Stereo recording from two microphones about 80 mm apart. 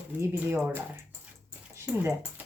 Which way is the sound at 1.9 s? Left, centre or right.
Centre.